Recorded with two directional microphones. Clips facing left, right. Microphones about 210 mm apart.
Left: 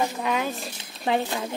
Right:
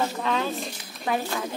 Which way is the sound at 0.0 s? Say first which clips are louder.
Even; 15° left (ahead or behind).